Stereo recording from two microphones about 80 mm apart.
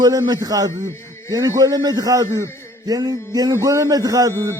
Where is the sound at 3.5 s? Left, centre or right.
Right.